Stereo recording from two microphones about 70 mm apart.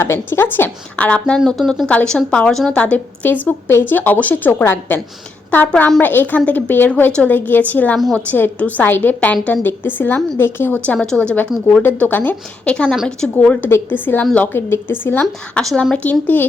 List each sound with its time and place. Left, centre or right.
0.0 s a woman's voice: left; by 1.4 s centre
1.5 s speech: centre
1.9 s a woman's voice: centre
2.7 s a woman's voice: centre
4.6 s speech: left
5.5 s a woman's voice: left
10.8 s a woman's voice: centre
12.6 s a woman's voice: centre
13.3 s a woman's voice: centre
13.7 s a woman's voice: left
15.5 s a woman's voice: centre
16.2 s a woman's voice: left